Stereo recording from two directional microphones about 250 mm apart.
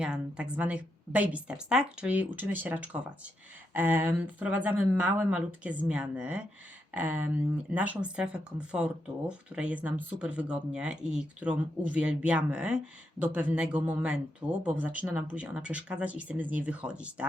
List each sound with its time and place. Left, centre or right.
0.0 s speech: centre